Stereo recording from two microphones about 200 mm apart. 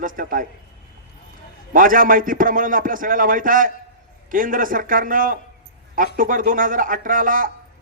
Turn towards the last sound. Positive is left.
turn(degrees=-45)  # may be behind; listen again after turning